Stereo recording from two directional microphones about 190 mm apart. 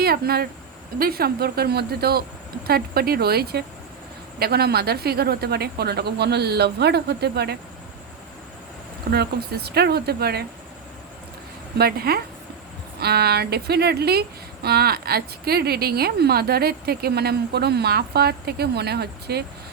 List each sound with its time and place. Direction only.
0.0 s speech: 55° right (ahead or behind)
9.0 s speech: 55° right (ahead or behind)
11.8 s speech: 55° right (ahead or behind)